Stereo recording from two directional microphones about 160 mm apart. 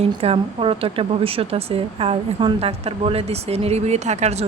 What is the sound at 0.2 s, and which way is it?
Speech, 35° right (ahead or behind).